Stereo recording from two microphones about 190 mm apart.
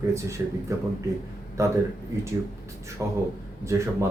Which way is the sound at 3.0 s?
15° right (ahead or behind).